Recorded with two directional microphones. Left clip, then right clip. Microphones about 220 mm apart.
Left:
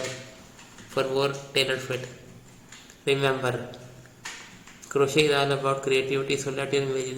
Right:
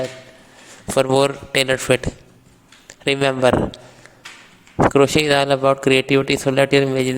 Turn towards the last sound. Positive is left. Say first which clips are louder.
# right 11 dB
turn(degrees=-45)  # may be behind; listen again after turning